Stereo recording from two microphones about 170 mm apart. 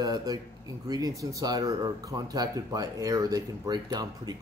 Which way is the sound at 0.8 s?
20° right (ahead or behind).